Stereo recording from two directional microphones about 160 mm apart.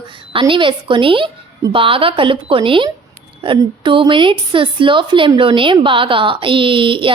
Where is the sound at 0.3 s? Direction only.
30° right (ahead or behind).